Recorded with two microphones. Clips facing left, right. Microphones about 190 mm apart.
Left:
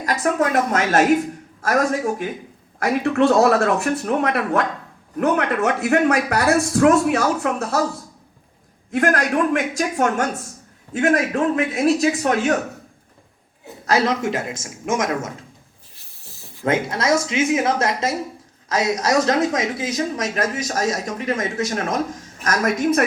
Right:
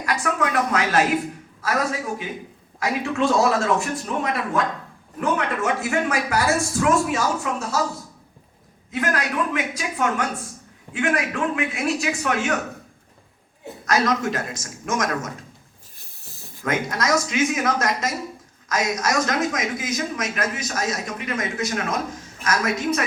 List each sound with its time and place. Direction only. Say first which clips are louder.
0.0 s a woman's voice: left 4 dB; 40° left (ahead or behind)
2.8 s speech: left 5 dB; 60° left (ahead or behind)
8.9 s a woman's voice: left 6 dB; 50° left (ahead or behind)
13.8 s speech: left 2 dB; 30° left (ahead or behind)
16.0 s rub: even; 45° right (ahead or behind)
16.6 s a woman's voice: left 4 dB; 30° left (ahead or behind); by 23.0 s 50° left (ahead or behind)